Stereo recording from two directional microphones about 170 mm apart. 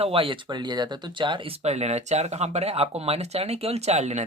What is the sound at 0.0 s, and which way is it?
Speech, 35° right (ahead or behind).